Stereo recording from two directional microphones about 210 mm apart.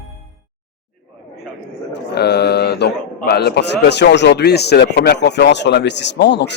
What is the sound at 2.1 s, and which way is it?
A man's voice, 50° left (ahead or behind).